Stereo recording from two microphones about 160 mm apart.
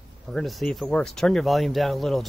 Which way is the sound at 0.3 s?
Centre (ahead or behind).